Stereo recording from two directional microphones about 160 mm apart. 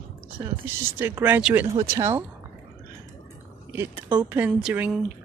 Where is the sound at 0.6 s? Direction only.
15° right (ahead or behind).